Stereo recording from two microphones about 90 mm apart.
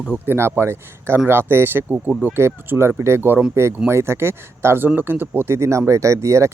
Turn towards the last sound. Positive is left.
turn(degrees=-35)  # may be behind; listen again after turning